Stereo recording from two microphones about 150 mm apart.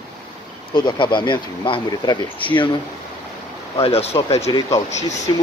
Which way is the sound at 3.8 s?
40° left (ahead or behind).